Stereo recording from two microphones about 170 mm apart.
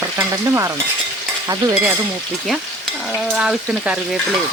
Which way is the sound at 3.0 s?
Centre (ahead or behind).